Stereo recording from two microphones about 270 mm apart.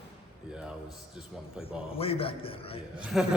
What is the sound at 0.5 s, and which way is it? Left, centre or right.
Mantra, centre.